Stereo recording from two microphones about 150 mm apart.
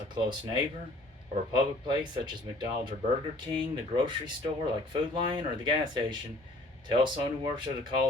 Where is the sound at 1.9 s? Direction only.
30° right (ahead or behind).